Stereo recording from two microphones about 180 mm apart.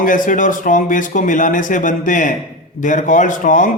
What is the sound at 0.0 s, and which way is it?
Speech, 50° left (ahead or behind).